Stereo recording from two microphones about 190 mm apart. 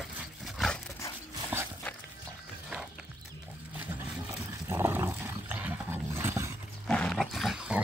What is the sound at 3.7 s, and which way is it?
Roaring cats, 10° right (ahead or behind).